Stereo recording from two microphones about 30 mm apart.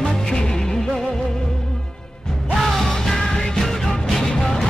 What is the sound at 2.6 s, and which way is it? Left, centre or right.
Music, centre.